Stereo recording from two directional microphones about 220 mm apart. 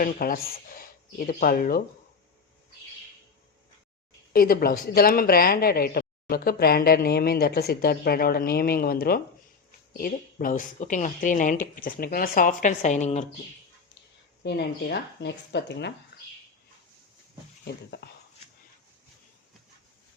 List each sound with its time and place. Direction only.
0.0 s speech: 40° left (ahead or behind)
4.3 s speech: 40° left (ahead or behind)
14.4 s speech: 50° left (ahead or behind)
16.1 s a sound: 50° left (ahead or behind)
17.7 s speech: 50° left (ahead or behind)